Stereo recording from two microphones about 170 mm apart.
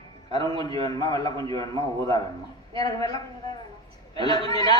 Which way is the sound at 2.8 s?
20° left (ahead or behind).